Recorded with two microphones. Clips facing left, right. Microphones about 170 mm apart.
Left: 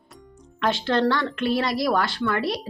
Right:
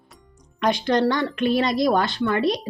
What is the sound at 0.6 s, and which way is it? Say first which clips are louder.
A woman's voice: right 2 dB; 15° right (ahead or behind).